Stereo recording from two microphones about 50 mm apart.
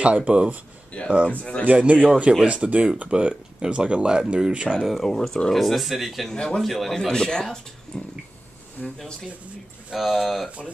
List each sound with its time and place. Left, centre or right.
0.0 s speech: right
0.9 s speech: left
1.7 s speech: right
4.8 s speech: centre
6.3 s speech: centre
6.6 s speech: centre
9.9 s speech: centre